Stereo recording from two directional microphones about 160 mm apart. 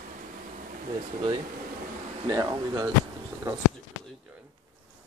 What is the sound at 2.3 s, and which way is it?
Speech, 20° right (ahead or behind).